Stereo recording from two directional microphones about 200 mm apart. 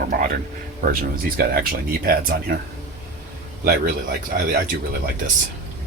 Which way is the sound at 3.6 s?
50° right (ahead or behind).